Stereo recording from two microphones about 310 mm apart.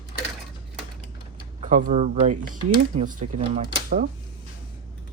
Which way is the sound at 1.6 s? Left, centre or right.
Right.